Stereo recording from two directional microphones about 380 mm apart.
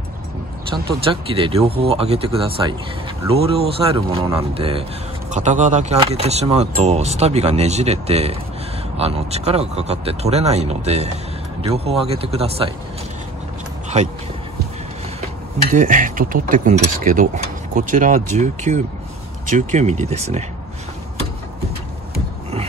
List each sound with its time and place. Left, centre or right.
0.8 s speech: centre
15.1 s speech: centre